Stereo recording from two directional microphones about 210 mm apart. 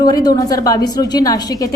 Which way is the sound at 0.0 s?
15° left (ahead or behind).